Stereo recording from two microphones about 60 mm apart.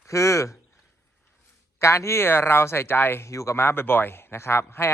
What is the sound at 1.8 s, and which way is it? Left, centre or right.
Speech, left.